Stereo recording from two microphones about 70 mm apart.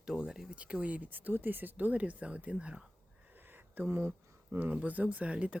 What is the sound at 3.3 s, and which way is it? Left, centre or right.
Speech, right.